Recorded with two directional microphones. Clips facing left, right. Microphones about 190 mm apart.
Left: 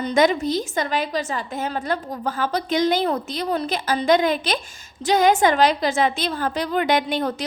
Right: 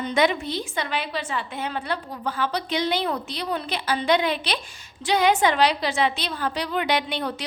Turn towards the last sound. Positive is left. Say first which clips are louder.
# left 4 dB
turn(degrees=45)  # may be behind; listen again after turning